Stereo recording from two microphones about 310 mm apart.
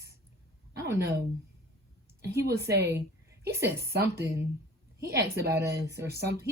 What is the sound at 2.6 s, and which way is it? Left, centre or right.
Speech, right.